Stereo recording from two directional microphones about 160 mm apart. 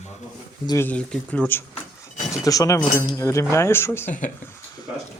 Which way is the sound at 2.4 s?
20° left (ahead or behind).